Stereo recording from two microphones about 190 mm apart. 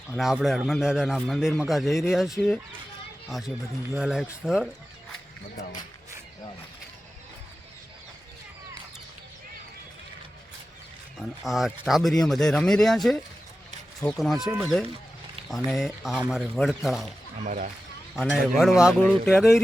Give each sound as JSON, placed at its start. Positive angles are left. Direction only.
{"t": 0.1, "sound": "speech", "side_deg": -5}
{"t": 11.2, "sound": "speech", "side_deg": 0}
{"t": 17.4, "sound": "speech", "side_deg": -40}
{"t": 18.3, "sound": "speech", "side_deg": 0}